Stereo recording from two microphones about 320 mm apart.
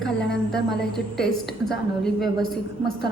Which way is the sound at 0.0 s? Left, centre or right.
Centre.